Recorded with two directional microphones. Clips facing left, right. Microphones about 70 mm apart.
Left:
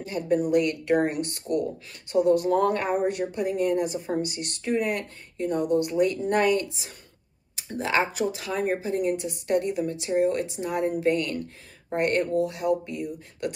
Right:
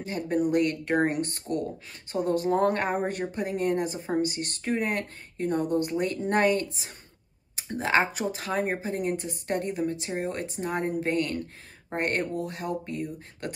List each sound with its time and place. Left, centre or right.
0.0 s speech: right